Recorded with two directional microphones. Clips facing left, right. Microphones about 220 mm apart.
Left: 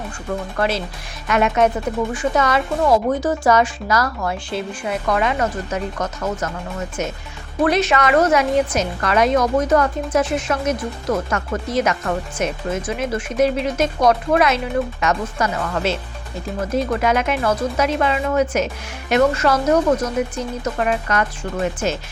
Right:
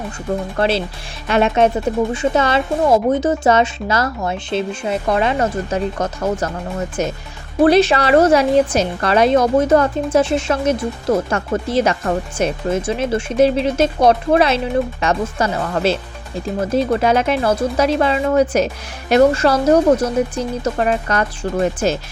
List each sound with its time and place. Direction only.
0.5 s a woman's voice: 30° right (ahead or behind)